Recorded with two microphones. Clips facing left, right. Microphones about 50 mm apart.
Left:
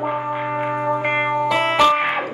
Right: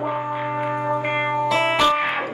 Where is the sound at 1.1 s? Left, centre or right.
Centre.